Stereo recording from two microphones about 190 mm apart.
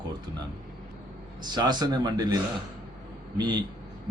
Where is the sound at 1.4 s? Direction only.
20° right (ahead or behind).